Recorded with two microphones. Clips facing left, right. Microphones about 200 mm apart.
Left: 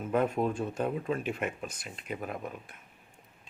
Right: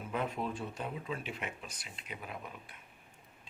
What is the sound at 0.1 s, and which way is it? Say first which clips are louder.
Speech: left 8 dB; 50° left (ahead or behind).